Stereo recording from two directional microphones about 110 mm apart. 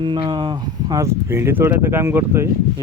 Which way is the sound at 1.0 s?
25° right (ahead or behind).